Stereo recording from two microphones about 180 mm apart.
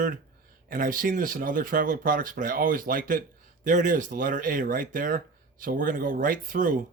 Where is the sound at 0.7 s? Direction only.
50° right (ahead or behind).